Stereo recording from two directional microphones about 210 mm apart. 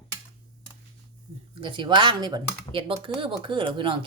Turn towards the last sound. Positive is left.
turn(degrees=-25)  # may be behind; listen again after turning